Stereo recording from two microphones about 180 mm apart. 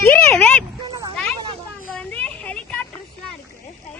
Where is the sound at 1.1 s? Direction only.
5° left (ahead or behind).